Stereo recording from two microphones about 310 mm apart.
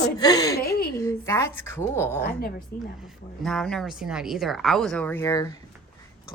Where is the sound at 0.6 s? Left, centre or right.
Left.